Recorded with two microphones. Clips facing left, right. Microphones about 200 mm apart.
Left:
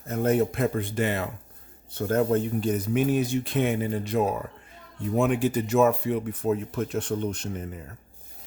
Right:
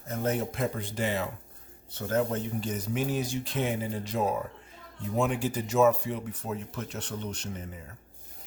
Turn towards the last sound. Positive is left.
turn(degrees=55)  # may be behind; listen again after turning